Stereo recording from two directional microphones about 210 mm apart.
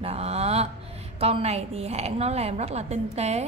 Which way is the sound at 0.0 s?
30° right (ahead or behind).